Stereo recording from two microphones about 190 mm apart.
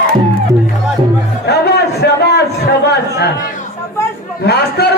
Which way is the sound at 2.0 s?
60° left (ahead or behind).